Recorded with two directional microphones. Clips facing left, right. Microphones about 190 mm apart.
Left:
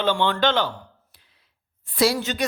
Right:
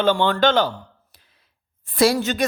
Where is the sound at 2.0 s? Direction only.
50° right (ahead or behind).